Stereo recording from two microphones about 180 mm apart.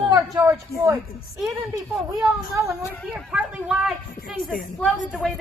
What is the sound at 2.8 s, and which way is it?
Speech, 10° left (ahead or behind).